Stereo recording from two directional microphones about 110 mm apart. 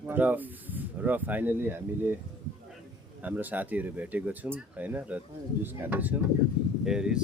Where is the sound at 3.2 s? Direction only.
15° right (ahead or behind).